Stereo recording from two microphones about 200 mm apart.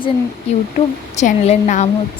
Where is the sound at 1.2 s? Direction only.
35° left (ahead or behind).